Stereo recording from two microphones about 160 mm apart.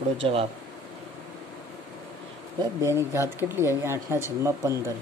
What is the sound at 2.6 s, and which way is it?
Speech, 20° right (ahead or behind).